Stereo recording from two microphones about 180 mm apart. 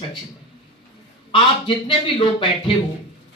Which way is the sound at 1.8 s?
25° left (ahead or behind).